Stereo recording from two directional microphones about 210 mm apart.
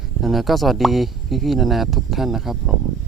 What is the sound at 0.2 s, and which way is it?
Speech, centre (ahead or behind).